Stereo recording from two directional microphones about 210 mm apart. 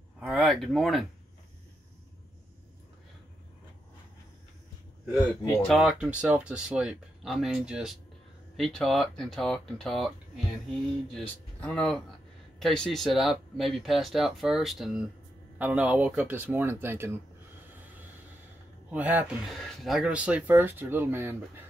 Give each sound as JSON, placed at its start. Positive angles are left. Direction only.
{"t": 0.2, "sound": "speech", "side_deg": 0}
{"t": 5.4, "sound": "speech", "side_deg": 15}
{"t": 5.7, "sound": "speech", "side_deg": 0}
{"t": 11.1, "sound": "speech", "side_deg": 5}
{"t": 18.9, "sound": "speech", "side_deg": -5}